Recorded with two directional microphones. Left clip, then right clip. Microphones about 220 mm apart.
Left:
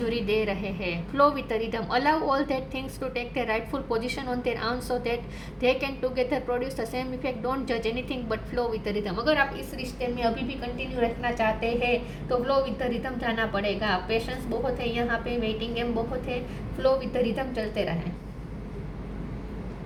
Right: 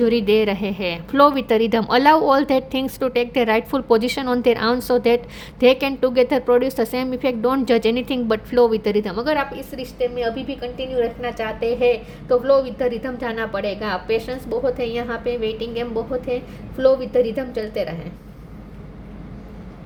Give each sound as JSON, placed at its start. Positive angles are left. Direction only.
{"t": 0.0, "sound": "a woman's voice", "side_deg": -50}
{"t": 17.1, "sound": "a woman's voice", "side_deg": -50}